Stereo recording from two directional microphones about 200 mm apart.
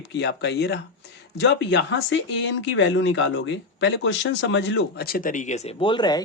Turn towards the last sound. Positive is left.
turn(degrees=20)  # may be behind; listen again after turning